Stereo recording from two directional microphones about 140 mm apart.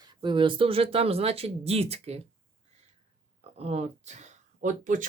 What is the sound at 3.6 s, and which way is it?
Speech, 50° right (ahead or behind).